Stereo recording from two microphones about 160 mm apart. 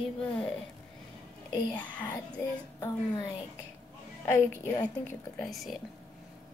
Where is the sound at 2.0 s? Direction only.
20° left (ahead or behind).